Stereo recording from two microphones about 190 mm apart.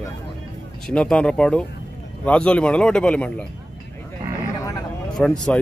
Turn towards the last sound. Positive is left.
turn(degrees=5)  # may be behind; listen again after turning